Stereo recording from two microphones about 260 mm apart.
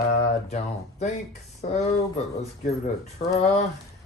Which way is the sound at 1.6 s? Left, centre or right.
Left.